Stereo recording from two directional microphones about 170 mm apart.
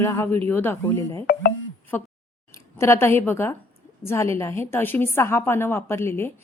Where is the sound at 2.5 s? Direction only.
15° left (ahead or behind).